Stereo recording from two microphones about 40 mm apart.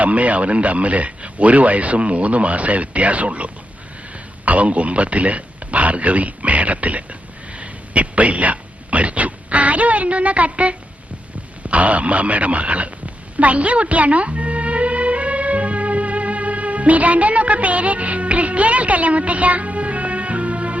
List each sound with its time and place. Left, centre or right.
0.0 s speech: right
13.3 s music: right